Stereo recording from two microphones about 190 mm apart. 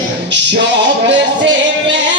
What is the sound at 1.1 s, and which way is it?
Music, 70° right (ahead or behind).